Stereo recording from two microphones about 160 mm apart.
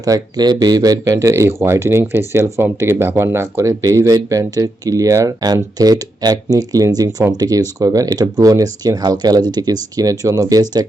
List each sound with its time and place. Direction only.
0.0 s speech: 25° right (ahead or behind)